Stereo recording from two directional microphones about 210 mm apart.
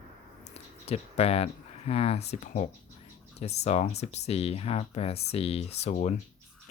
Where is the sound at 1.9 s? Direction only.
30° left (ahead or behind).